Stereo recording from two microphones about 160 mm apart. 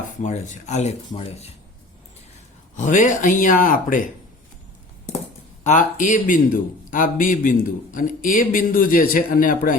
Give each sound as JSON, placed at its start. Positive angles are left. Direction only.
{"t": 0.2, "sound": "speech", "side_deg": 45}
{"t": 2.7, "sound": "speech", "side_deg": 50}
{"t": 5.6, "sound": "a man's voice", "side_deg": 50}